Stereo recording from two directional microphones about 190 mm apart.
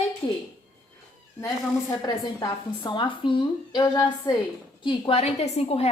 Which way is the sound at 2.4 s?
25° left (ahead or behind).